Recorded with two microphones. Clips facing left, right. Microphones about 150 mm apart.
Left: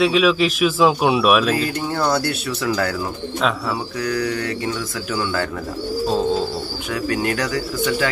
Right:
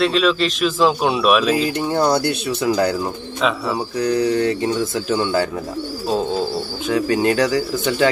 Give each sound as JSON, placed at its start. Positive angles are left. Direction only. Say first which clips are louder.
{"t": 0.0, "sound": "speech", "louder": "left 1 dB", "side_deg": 5}
{"t": 1.5, "sound": "speech", "louder": "right 3 dB", "side_deg": -20}
{"t": 4.0, "sound": "speech", "louder": "right 6 dB", "side_deg": -25}
{"t": 6.9, "sound": "speech", "louder": "right 5 dB", "side_deg": -25}